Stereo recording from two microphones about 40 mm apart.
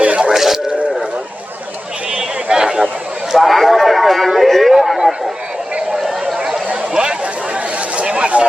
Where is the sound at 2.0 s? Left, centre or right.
Right.